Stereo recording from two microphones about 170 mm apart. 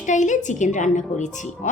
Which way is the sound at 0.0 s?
45° left (ahead or behind).